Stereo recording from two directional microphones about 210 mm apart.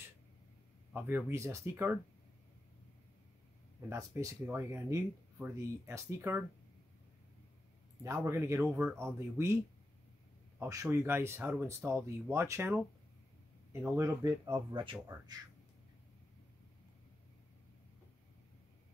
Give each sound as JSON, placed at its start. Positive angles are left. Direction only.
{"t": 0.9, "sound": "speech", "side_deg": -10}
{"t": 3.9, "sound": "speech", "side_deg": -15}
{"t": 8.0, "sound": "speech", "side_deg": -15}
{"t": 10.6, "sound": "speech", "side_deg": -15}
{"t": 13.9, "sound": "speech", "side_deg": -15}